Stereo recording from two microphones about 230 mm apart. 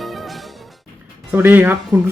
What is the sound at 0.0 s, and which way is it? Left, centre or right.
Music, centre.